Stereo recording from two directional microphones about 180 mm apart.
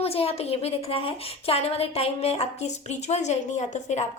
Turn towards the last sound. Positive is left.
turn(degrees=40)  # may be behind; listen again after turning